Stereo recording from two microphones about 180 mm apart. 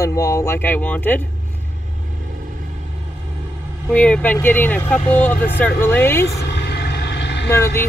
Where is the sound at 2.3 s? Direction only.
50° right (ahead or behind).